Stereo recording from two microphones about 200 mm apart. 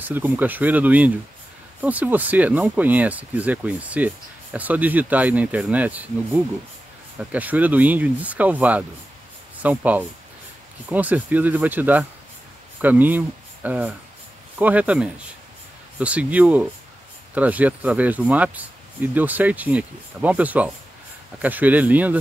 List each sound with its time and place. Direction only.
0.0 s speech: 10° right (ahead or behind)